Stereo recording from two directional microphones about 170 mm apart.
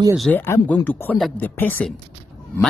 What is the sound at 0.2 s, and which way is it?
Speech, 10° left (ahead or behind).